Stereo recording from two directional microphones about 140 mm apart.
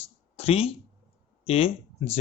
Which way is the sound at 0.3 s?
45° left (ahead or behind).